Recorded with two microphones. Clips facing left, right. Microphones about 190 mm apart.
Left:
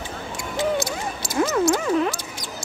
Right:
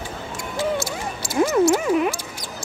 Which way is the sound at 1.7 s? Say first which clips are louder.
Right 1 dB; 15° right (ahead or behind).